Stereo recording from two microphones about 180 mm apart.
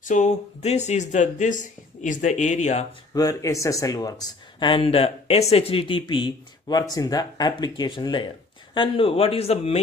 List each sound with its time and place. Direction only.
0.0 s speech: 40° left (ahead or behind)
3.2 s speech: 20° left (ahead or behind); by 9.8 s 35° left (ahead or behind)